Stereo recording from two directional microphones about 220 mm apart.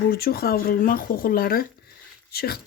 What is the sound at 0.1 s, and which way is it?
Speech, 45° left (ahead or behind).